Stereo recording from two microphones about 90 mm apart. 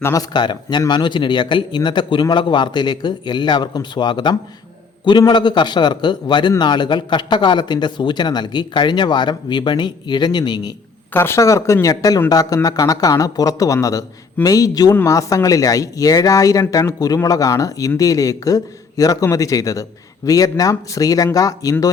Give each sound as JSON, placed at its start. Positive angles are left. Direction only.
{"t": 0.0, "sound": "a man's voice", "side_deg": 40}
{"t": 0.3, "sound": "speech", "side_deg": 55}
{"t": 11.1, "sound": "a man's voice", "side_deg": 25}